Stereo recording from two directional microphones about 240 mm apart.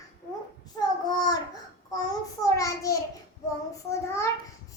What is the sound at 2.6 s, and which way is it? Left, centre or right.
A child's voice, centre.